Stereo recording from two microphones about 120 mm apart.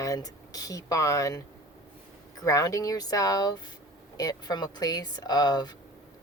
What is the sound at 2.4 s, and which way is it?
A woman's voice, 25° left (ahead or behind).